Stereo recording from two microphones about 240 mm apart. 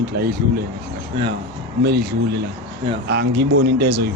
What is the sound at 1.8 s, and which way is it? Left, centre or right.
Speech, right.